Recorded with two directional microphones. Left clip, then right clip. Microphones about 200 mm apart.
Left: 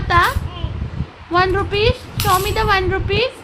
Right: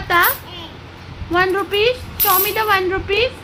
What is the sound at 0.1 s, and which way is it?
A woman's voice, 10° right (ahead or behind).